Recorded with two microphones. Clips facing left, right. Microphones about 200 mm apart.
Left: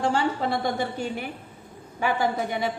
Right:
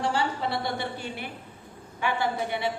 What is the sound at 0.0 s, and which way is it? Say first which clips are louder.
A woman's voice: left 3 dB; 50° left (ahead or behind).